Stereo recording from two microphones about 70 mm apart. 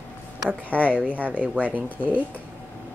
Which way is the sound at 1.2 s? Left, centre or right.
Right.